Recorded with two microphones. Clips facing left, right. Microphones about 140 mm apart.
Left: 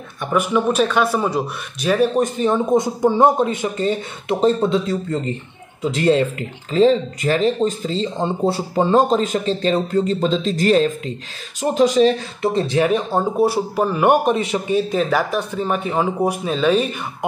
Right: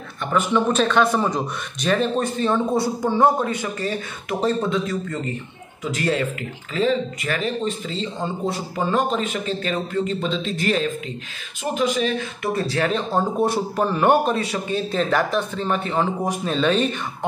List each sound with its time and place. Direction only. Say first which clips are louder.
0.3 s a man's voice: left 2 dB; 10° left (ahead or behind)
14.2 s a man's voice: left 4 dB; 20° left (ahead or behind); by 16.9 s 5° left (ahead or behind)